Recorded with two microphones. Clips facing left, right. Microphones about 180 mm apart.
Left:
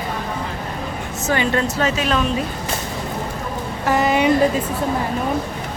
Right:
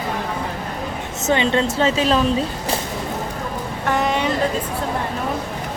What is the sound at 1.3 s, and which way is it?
Speech, 25° right (ahead or behind).